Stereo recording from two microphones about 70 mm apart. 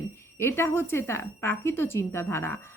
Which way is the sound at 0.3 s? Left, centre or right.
Left.